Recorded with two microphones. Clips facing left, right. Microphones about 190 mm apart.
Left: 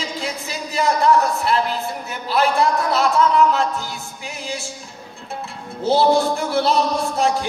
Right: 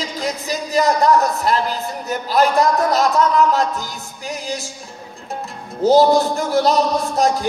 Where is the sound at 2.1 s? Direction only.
40° right (ahead or behind).